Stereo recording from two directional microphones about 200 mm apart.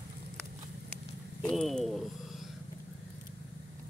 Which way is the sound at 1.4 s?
Centre (ahead or behind).